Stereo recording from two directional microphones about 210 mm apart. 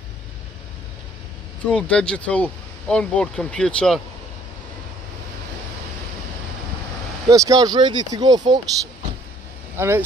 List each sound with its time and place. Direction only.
1.7 s speech: 5° left (ahead or behind)
7.2 s speech: 15° right (ahead or behind)
9.8 s speech: 10° right (ahead or behind)